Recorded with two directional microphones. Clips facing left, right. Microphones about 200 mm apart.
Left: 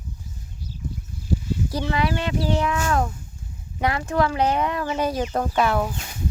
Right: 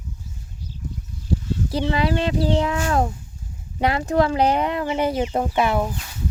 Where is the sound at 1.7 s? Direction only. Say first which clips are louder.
Right 3 dB; 25° right (ahead or behind).